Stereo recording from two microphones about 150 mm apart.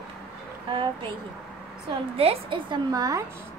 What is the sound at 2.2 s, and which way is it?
A woman's voice, 35° right (ahead or behind).